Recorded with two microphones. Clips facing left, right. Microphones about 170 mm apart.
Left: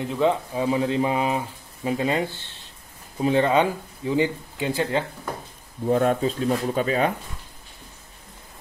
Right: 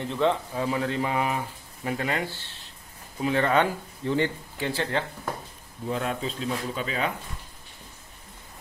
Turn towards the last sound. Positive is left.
turn(degrees=45)  # may be behind; listen again after turning